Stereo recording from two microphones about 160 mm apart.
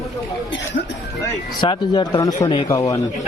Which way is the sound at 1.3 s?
25° left (ahead or behind).